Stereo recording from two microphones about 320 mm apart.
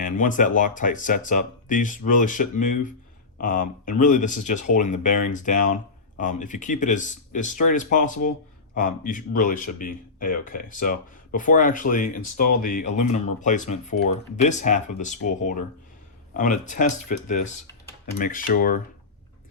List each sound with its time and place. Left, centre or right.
0.0 s speech: left